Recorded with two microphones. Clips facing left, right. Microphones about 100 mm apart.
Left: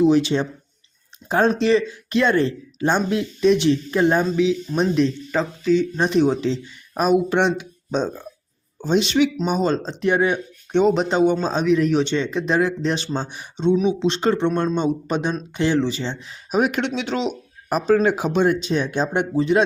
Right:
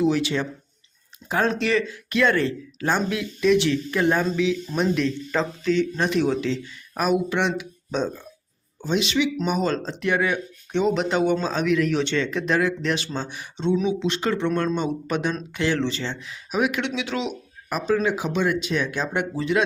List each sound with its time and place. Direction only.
0.0 s speech: 25° left (ahead or behind)
5.3 s speech: 10° left (ahead or behind)
6.1 s speech: 25° left (ahead or behind)
7.3 s speech: 35° left (ahead or behind)
9.4 s speech: 25° left (ahead or behind)
14.0 s speech: 30° left (ahead or behind)
16.2 s speech: 35° left (ahead or behind)